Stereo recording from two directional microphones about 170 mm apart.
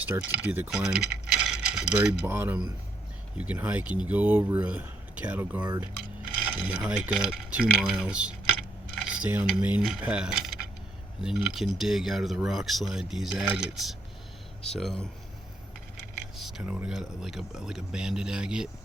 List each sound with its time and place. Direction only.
0.1 s speech: 10° right (ahead or behind)
1.3 s mechanisms: 5° right (ahead or behind)
2.2 s speech: 15° right (ahead or behind); by 15.0 s centre (ahead or behind)
16.4 s speech: 5° right (ahead or behind)